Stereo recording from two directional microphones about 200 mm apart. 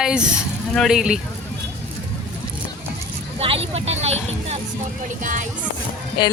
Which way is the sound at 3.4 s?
30° right (ahead or behind).